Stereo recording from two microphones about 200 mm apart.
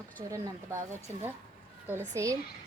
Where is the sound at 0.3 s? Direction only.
15° right (ahead or behind).